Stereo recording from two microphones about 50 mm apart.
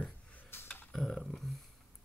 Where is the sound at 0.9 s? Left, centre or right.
Centre.